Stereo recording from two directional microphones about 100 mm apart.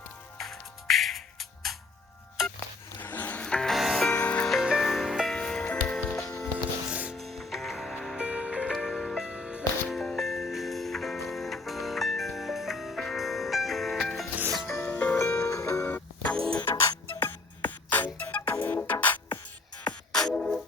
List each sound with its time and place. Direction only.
0.3 s music: centre (ahead or behind)
2.4 s a sound: centre (ahead or behind)
3.0 s music: 20° left (ahead or behind); by 4.1 s centre (ahead or behind)
4.2 s music: 10° left (ahead or behind)
4.5 s music: 5° right (ahead or behind)
6.9 s music: 15° right (ahead or behind)
7.2 s music: centre (ahead or behind)
8.2 s music: 10° right (ahead or behind)
10.0 s music: 5° left (ahead or behind)
14.8 s music: 15° left (ahead or behind)
19.8 s music: 5° left (ahead or behind)